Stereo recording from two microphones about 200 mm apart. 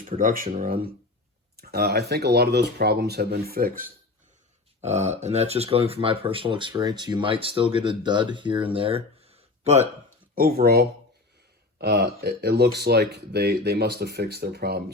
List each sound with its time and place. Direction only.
0.0 s speech: 40° right (ahead or behind)
4.8 s speech: 35° right (ahead or behind)
10.3 s speech: 50° right (ahead or behind)